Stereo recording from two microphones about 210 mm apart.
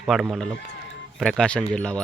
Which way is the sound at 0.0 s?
Centre (ahead or behind).